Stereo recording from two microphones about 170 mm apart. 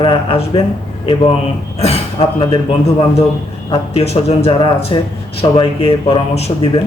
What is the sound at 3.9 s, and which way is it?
A man's voice, 35° left (ahead or behind).